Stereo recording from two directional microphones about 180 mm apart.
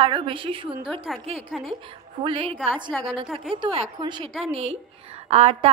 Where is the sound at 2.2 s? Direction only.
30° right (ahead or behind).